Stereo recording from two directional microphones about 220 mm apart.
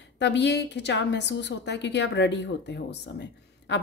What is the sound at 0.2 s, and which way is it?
Speech, 50° left (ahead or behind).